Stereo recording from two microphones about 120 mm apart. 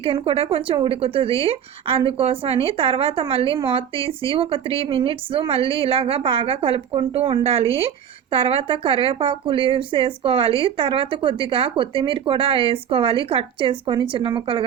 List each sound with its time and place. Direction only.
0.0 s a woman's voice: 50° right (ahead or behind)